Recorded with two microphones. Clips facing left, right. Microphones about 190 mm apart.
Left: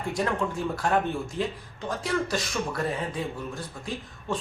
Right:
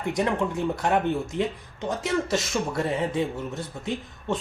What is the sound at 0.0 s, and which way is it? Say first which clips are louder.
Speech: right 3 dB; 20° right (ahead or behind).